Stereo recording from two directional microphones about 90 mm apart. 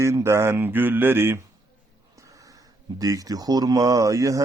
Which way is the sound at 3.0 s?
40° right (ahead or behind).